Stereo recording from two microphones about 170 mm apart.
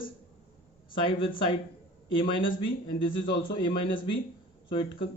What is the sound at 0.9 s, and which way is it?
Speech, 30° left (ahead or behind).